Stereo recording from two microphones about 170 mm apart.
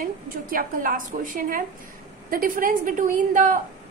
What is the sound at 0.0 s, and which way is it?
A woman's voice, 55° right (ahead or behind).